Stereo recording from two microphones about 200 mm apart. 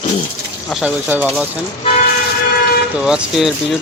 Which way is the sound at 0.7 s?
5° right (ahead or behind).